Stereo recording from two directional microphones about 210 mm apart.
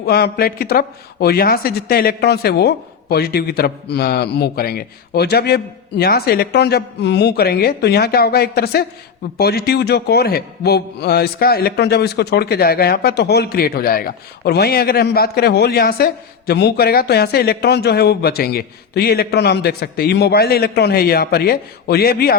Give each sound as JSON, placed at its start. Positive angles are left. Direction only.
{"t": 0.0, "sound": "a man's voice", "side_deg": 50}